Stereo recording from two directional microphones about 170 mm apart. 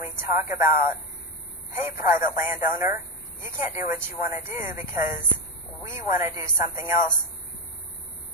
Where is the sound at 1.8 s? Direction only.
15° right (ahead or behind).